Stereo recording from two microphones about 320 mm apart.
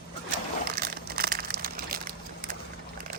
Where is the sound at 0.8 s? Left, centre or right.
Right.